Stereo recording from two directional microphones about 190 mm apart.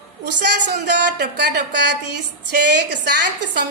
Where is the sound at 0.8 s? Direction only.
65° right (ahead or behind).